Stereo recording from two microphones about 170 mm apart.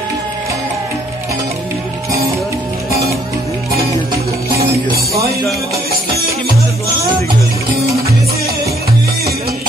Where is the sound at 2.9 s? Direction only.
20° right (ahead or behind).